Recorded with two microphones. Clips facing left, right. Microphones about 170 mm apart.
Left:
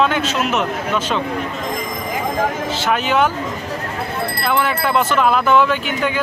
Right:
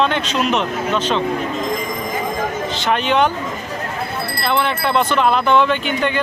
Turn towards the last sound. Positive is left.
turn(degrees=5)  # may be behind; listen again after turning